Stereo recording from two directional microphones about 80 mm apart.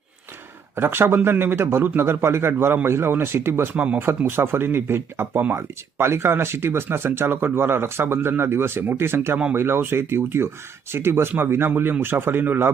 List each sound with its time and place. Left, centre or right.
0.8 s speech: right
3.8 s speech: centre